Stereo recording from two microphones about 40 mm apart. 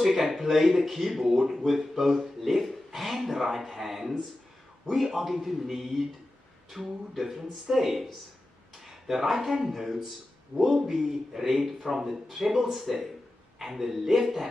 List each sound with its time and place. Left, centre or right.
0.0 s speech: centre